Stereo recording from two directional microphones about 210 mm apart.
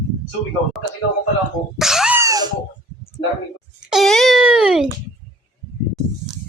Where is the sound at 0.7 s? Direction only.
Centre (ahead or behind).